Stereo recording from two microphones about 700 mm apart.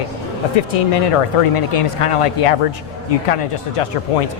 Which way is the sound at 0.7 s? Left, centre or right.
Left.